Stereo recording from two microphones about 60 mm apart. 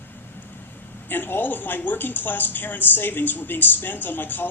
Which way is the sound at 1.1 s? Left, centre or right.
Left.